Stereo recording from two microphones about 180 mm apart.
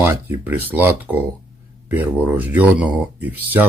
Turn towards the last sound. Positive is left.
turn(degrees=-10)  # may be behind; listen again after turning